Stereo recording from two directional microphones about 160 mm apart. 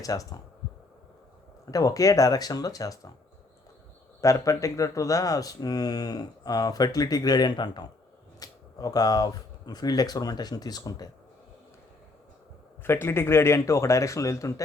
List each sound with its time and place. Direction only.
0.0 s speech: 20° left (ahead or behind)
1.7 s speech: 20° left (ahead or behind)
4.2 s speech: 20° left (ahead or behind)
12.8 s speech: 15° left (ahead or behind)